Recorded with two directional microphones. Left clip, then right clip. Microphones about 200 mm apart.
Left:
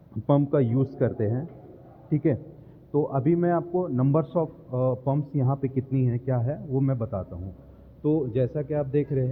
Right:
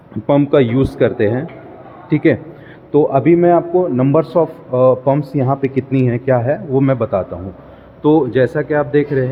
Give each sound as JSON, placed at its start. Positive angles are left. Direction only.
{"t": 0.3, "sound": "a man's voice", "side_deg": -15}